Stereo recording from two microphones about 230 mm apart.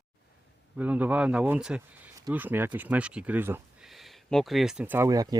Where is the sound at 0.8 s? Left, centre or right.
Centre.